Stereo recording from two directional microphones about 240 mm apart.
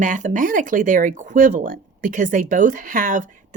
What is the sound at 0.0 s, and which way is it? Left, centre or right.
Speech, right.